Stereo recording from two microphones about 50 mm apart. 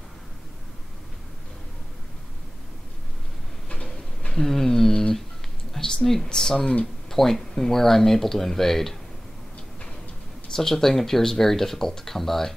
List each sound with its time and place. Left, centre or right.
3.8 s a sound: centre
6.2 s speech: centre
10.5 s speech: centre